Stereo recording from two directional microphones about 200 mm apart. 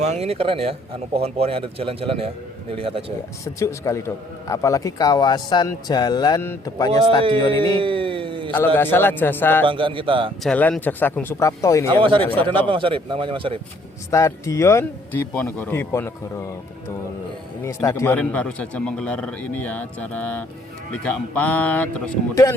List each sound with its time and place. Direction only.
0.0 s a man's voice: 30° right (ahead or behind)
3.4 s a man's voice: 15° left (ahead or behind)
7.8 s a sound: 25° right (ahead or behind)
8.5 s a man's voice: 10° left (ahead or behind)
9.6 s a man's voice: 25° right (ahead or behind)
10.4 s a man's voice: 5° left (ahead or behind)
12.5 s a man's voice: 25° right (ahead or behind)
14.1 s a man's voice: 15° left (ahead or behind)
17.6 s a man's voice: 15° left (ahead or behind)